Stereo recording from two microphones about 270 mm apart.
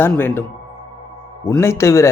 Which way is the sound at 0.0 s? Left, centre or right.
Centre.